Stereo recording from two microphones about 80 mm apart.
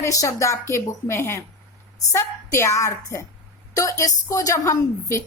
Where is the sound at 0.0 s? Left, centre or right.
Left.